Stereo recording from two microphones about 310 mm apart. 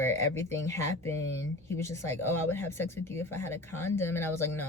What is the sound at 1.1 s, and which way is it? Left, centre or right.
Speech, left.